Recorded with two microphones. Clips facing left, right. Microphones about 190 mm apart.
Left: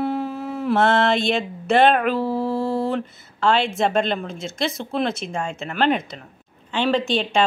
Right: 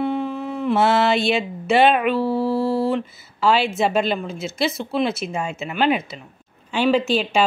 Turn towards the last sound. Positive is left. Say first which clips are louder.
# right 1 dB
turn(degrees=-5)  # may be behind; listen again after turning